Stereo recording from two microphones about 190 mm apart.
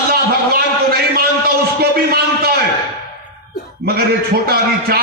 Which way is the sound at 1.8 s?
55° right (ahead or behind).